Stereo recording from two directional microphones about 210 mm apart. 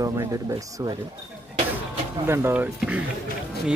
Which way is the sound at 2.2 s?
10° right (ahead or behind).